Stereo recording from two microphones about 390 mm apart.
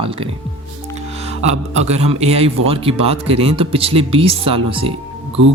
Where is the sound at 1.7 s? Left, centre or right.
Centre.